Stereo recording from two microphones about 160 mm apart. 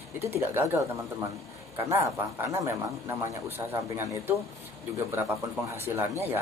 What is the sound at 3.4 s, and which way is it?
Speech, 15° right (ahead or behind).